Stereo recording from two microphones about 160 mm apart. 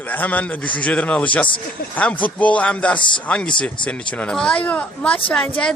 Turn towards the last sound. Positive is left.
turn(degrees=10)  # may be behind; listen again after turning